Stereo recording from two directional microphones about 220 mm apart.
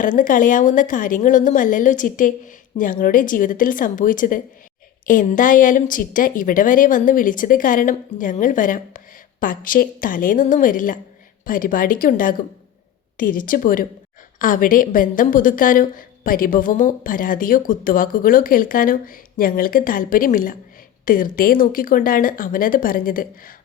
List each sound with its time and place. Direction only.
0.0 s a woman's voice: 35° left (ahead or behind)